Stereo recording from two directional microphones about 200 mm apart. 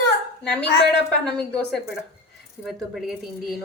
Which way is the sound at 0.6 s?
55° left (ahead or behind).